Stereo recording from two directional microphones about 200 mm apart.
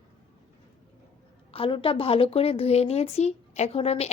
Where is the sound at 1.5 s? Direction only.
25° left (ahead or behind).